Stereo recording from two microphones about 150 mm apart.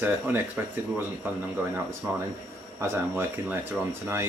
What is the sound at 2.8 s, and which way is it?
Speech, 15° right (ahead or behind).